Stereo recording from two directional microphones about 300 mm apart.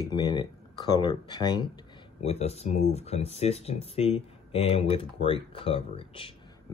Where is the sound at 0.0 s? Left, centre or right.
Centre.